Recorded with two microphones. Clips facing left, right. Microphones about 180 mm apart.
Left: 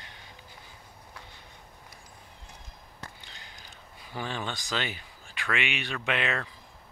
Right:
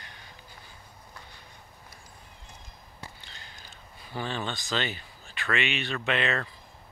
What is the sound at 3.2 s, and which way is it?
Speech, 15° left (ahead or behind).